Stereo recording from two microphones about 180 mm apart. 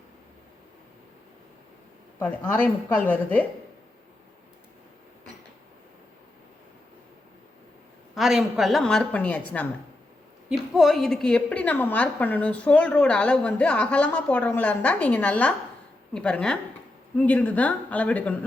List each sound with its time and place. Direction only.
2.1 s a woman's voice: 10° left (ahead or behind)
8.1 s a woman's voice: centre (ahead or behind)